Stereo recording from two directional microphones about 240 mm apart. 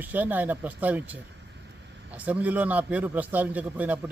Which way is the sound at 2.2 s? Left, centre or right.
Centre.